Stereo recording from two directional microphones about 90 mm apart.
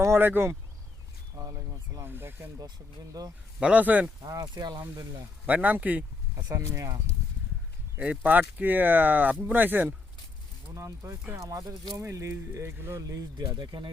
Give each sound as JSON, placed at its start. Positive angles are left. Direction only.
{"t": 0.0, "sound": "speech", "side_deg": -25}
{"t": 1.4, "sound": "a sound", "side_deg": -35}
{"t": 2.6, "sound": "speech", "side_deg": -45}
{"t": 3.6, "sound": "speech", "side_deg": -15}
{"t": 4.2, "sound": "speech", "side_deg": -45}
{"t": 5.5, "sound": "speech", "side_deg": -20}
{"t": 6.3, "sound": "speech", "side_deg": -35}
{"t": 7.9, "sound": "speech", "side_deg": -15}
{"t": 10.8, "sound": "speech", "side_deg": -30}
{"t": 11.3, "sound": "speech", "side_deg": -40}
{"t": 12.0, "sound": "speech", "side_deg": -30}
{"t": 13.0, "sound": "speech", "side_deg": -40}